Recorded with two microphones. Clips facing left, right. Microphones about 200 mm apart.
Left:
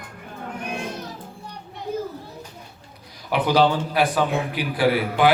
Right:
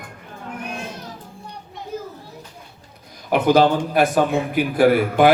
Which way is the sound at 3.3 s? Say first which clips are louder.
Right 4 dB; 50° right (ahead or behind).